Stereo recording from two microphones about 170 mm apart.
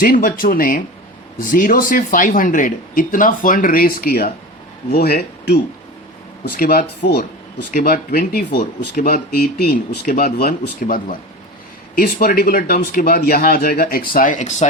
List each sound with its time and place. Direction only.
0.0 s speech: 55° left (ahead or behind)
7.7 s speech: 60° left (ahead or behind); by 14.7 s 45° left (ahead or behind)